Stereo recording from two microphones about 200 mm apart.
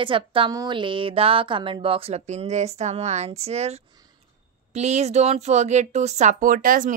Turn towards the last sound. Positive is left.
turn(degrees=-45)  # may be behind; listen again after turning